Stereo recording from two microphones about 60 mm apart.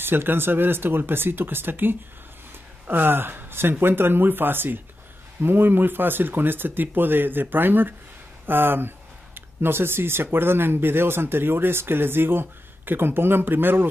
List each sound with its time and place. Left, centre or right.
0.0 s speech: right